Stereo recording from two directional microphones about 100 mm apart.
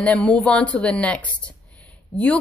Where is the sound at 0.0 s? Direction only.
10° left (ahead or behind).